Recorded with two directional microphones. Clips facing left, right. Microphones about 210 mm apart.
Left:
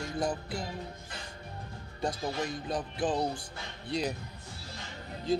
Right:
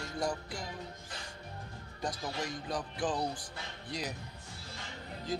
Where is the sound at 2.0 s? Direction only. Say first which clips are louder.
Left 5 dB; 25° left (ahead or behind).